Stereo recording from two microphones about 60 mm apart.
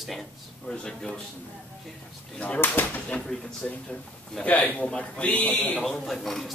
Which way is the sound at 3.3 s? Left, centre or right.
Centre.